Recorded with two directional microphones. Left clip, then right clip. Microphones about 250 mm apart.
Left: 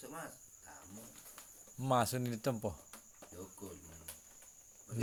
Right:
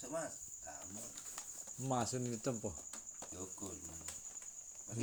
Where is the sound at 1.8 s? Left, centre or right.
Left.